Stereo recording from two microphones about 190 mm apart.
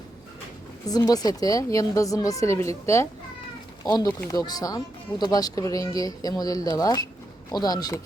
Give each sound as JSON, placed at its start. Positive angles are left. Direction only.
{"t": 0.9, "sound": "speech", "side_deg": 20}